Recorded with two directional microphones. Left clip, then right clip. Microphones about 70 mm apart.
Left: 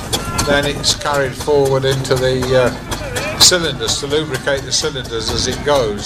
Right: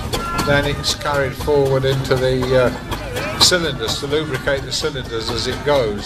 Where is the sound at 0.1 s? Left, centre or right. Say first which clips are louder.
Left 2 dB; left.